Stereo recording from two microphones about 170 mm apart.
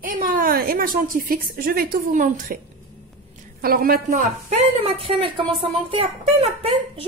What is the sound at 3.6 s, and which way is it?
Speech, 60° right (ahead or behind).